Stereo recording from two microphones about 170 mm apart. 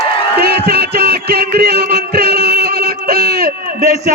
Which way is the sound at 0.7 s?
70° right (ahead or behind).